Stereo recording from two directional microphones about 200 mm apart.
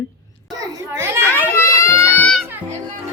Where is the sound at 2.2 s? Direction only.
5° left (ahead or behind).